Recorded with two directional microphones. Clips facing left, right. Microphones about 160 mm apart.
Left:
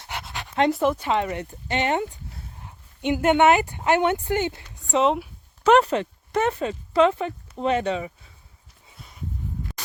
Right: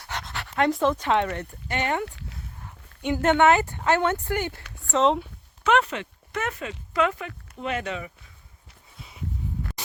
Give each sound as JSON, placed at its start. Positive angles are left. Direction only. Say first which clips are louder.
{"t": 0.1, "sound": "pant", "louder": "even", "side_deg": 10}
{"t": 0.7, "sound": "speech", "louder": "even", "side_deg": 10}
{"t": 1.3, "sound": "speech", "louder": "left 3 dB", "side_deg": 20}
{"t": 3.2, "sound": "speech", "louder": "left 1 dB", "side_deg": 15}
{"t": 4.9, "sound": "speech", "louder": "left 1 dB", "side_deg": 10}
{"t": 5.6, "sound": "speech", "louder": "left 5 dB", "side_deg": 35}